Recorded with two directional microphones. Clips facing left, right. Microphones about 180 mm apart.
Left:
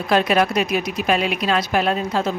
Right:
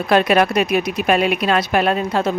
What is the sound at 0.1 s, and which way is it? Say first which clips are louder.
Speech: right 3 dB; 60° right (ahead or behind).